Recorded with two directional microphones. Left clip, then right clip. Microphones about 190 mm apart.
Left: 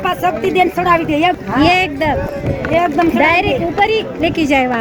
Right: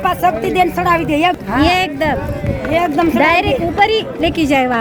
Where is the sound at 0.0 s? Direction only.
25° right (ahead or behind).